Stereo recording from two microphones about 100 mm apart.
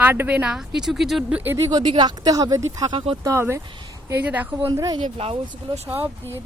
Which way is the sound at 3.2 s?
25° right (ahead or behind).